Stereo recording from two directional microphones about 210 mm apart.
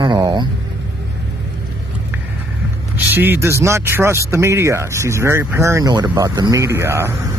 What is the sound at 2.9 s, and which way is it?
A man's voice, 10° right (ahead or behind).